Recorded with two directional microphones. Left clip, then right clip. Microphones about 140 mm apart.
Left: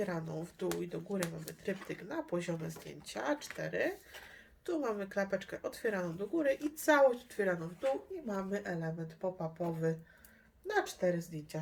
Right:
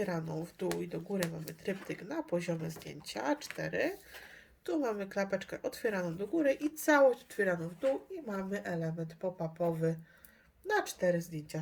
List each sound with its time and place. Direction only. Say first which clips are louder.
0.0 s speech: right 2 dB; 25° right (ahead or behind); by 7.9 s 45° right (ahead or behind)
8.3 s speech: even; 60° right (ahead or behind); by 11.6 s 40° right (ahead or behind)